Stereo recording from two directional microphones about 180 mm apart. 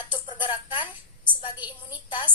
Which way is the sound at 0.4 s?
25° left (ahead or behind).